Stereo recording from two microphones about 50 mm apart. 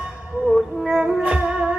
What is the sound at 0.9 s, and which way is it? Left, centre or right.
Music, centre.